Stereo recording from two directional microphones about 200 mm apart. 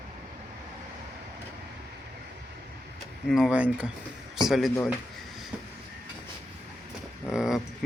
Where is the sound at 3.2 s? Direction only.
Centre (ahead or behind).